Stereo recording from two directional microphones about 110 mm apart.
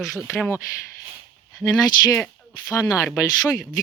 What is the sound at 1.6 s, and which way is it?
Speech, 25° left (ahead or behind).